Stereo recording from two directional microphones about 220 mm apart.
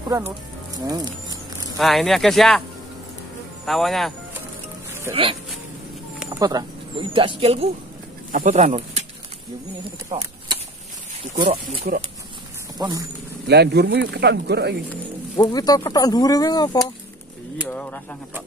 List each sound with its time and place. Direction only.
0.7 s speech: 15° right (ahead or behind)
1.8 s speech: centre (ahead or behind)
3.6 s speech: centre (ahead or behind)
5.1 s speech: 25° right (ahead or behind)
6.1 s speech: 15° right (ahead or behind); by 9.0 s 30° right (ahead or behind)
9.8 s speech: 20° right (ahead or behind)
12.7 s speech: 15° right (ahead or behind)
13.5 s speech: 50° right (ahead or behind)
14.9 s speech: 15° left (ahead or behind)